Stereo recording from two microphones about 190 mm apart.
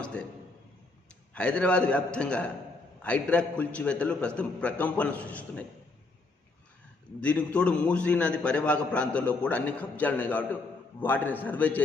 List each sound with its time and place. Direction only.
0.0 s a sound: 5° left (ahead or behind)
1.3 s a man's voice: 5° left (ahead or behind)
7.2 s a man's voice: 5° left (ahead or behind)